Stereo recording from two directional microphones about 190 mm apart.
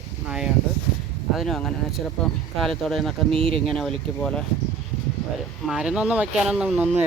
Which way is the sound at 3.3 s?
30° right (ahead or behind).